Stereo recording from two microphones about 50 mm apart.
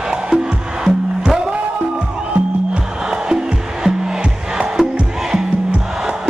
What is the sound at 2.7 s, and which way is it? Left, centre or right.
Music, centre.